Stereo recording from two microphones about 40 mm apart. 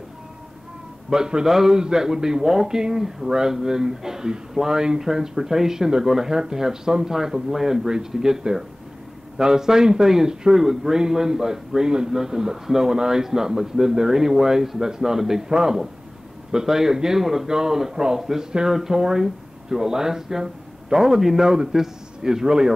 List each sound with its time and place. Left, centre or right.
1.1 s speech: centre